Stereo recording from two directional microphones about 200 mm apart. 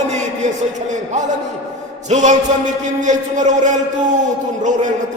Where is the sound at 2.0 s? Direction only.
35° right (ahead or behind).